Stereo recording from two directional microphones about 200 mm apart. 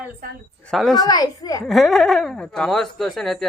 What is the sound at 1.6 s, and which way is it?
Speech, centre (ahead or behind).